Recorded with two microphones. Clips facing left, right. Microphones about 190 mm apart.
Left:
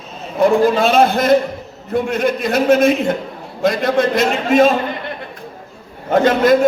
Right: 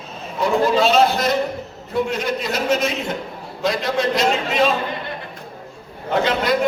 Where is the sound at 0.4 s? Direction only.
55° left (ahead or behind).